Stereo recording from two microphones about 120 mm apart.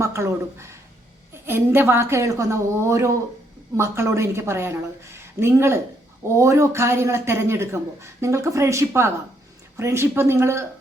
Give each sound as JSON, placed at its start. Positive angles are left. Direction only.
{"t": 0.0, "sound": "a woman's voice", "side_deg": -25}